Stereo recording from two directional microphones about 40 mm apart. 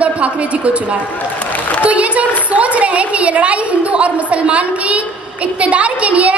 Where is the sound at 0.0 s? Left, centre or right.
Right.